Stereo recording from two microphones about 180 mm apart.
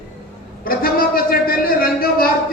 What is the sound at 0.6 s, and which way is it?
A woman's voice, 55° left (ahead or behind).